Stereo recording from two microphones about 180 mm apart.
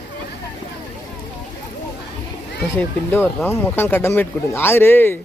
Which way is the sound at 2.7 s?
10° left (ahead or behind).